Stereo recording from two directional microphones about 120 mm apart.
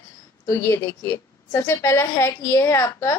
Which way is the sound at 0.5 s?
25° left (ahead or behind).